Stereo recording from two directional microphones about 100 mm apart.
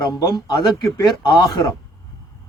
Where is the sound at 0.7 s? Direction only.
35° left (ahead or behind).